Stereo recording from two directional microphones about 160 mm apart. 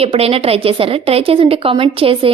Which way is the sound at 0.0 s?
35° right (ahead or behind).